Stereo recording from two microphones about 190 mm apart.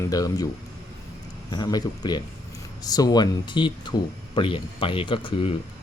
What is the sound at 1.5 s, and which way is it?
Speech, 20° left (ahead or behind).